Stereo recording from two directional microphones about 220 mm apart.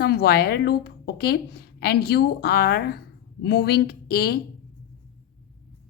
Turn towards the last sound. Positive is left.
turn(degrees=45)  # may be behind; listen again after turning